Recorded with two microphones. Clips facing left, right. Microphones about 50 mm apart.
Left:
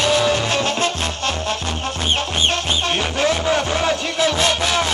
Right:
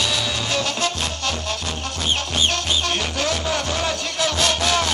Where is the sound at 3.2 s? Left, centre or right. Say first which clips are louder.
Left 8 dB; left.